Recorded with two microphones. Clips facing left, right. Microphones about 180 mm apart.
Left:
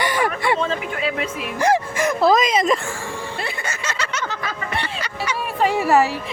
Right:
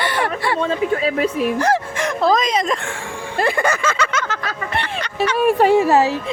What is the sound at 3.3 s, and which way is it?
Music, 50° right (ahead or behind).